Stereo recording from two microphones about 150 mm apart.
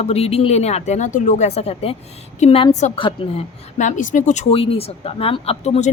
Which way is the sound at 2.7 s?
50° left (ahead or behind).